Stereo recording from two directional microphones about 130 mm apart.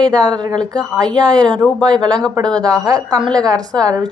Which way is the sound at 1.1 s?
35° right (ahead or behind).